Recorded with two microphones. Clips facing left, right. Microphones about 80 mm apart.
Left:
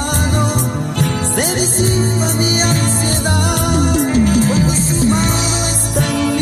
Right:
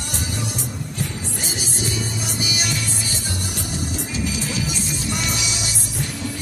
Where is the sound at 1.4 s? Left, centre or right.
Left.